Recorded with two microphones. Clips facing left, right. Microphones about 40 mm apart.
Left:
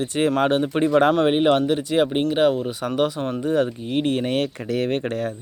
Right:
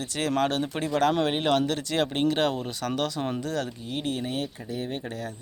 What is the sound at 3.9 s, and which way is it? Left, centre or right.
Speech, left.